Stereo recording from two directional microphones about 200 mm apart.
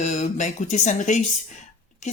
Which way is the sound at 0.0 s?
35° left (ahead or behind).